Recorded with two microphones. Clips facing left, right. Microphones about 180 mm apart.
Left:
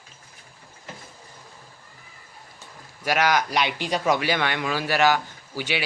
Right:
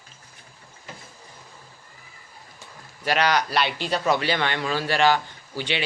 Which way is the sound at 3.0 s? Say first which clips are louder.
Even; 10° left (ahead or behind).